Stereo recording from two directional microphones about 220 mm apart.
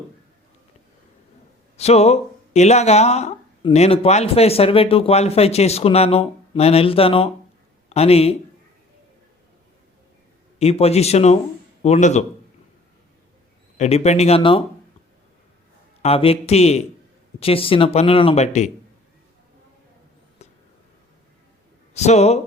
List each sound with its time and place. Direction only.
1.7 s a man's voice: 30° left (ahead or behind)
10.6 s speech: 30° left (ahead or behind)
13.7 s speech: 30° left (ahead or behind)
16.0 s speech: 25° left (ahead or behind)
21.9 s speech: 30° left (ahead or behind)